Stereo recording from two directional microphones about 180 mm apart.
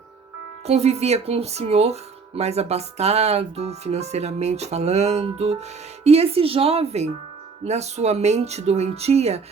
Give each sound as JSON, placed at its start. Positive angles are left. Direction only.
{"t": 0.7, "sound": "speech", "side_deg": -35}